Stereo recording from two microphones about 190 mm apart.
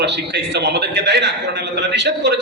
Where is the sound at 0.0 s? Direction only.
65° right (ahead or behind).